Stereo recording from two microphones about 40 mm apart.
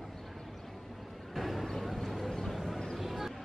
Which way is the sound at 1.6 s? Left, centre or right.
Centre.